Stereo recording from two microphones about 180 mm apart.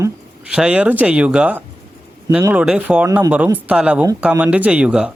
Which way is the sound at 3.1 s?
20° right (ahead or behind).